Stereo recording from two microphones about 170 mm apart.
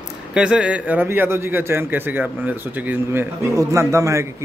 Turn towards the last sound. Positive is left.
turn(degrees=-15)  # may be behind; listen again after turning